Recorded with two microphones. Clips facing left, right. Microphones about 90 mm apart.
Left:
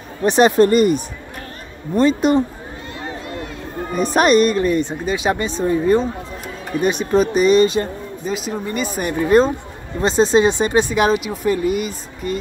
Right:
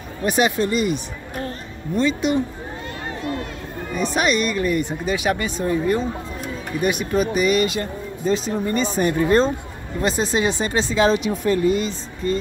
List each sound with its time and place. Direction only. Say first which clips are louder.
0.4 s speech: left 8 dB; 45° left (ahead or behind)
3.9 s speech: left 6 dB; 45° left (ahead or behind)
8.3 s speech: right 3 dB; 10° left (ahead or behind)
10.0 s speech: left 6 dB; 25° left (ahead or behind)